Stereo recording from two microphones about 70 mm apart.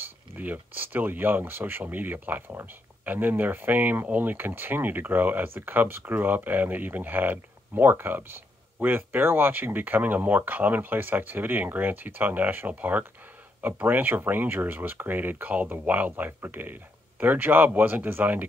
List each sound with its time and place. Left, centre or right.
0.0 s speech: right